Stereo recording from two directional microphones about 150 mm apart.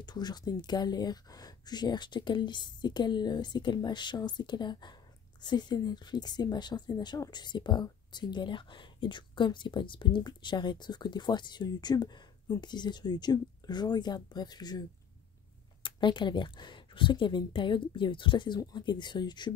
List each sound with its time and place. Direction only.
0.0 s speech: 25° left (ahead or behind)